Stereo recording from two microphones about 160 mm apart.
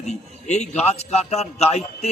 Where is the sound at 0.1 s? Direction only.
45° left (ahead or behind).